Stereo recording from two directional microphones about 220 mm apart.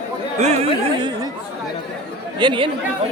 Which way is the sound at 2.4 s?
20° right (ahead or behind).